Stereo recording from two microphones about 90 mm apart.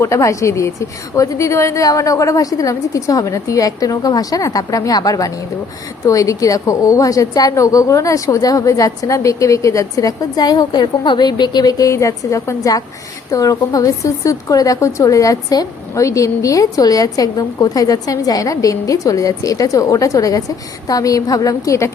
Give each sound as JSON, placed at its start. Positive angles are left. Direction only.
{"t": 0.0, "sound": "a woman's voice", "side_deg": 35}